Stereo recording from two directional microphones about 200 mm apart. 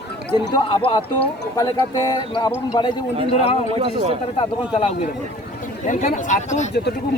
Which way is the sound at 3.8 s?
30° right (ahead or behind).